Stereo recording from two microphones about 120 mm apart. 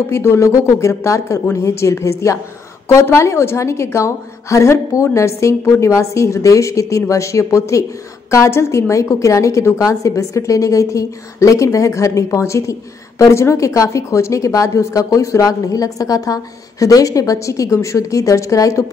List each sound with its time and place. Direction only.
0.1 s a woman's voice: 20° left (ahead or behind)